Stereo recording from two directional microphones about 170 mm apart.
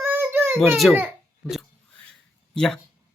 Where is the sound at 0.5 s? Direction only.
Centre (ahead or behind).